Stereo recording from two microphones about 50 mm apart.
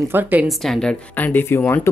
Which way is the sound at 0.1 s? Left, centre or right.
Right.